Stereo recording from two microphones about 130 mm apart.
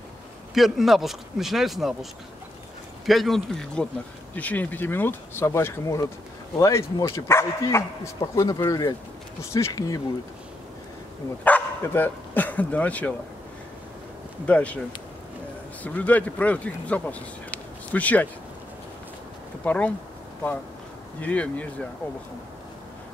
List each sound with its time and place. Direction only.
0.6 s speech: centre (ahead or behind)
3.1 s speech: centre (ahead or behind); by 10.0 s 25° left (ahead or behind)
11.4 s speech: 15° left (ahead or behind)
14.4 s speech: 10° left (ahead or behind)
15.8 s speech: 10° left (ahead or behind)
19.6 s speech: 10° left (ahead or behind)
21.2 s speech: 10° left (ahead or behind)